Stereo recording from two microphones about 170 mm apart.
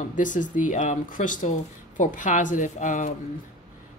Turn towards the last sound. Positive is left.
turn(degrees=50)  # may be behind; listen again after turning